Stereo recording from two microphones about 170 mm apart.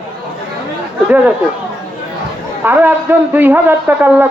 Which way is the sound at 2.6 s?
10° right (ahead or behind).